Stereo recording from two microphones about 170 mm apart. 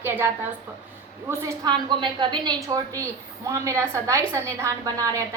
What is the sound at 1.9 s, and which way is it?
A woman's voice, 30° right (ahead or behind).